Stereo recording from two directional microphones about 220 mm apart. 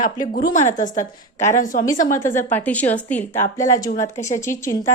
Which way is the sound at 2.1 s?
10° left (ahead or behind).